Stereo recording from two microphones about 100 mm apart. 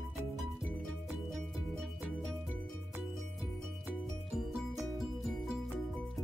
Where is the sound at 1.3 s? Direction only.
5° left (ahead or behind).